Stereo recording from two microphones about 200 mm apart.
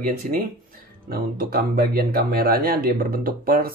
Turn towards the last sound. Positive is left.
turn(degrees=-45)  # may be behind; listen again after turning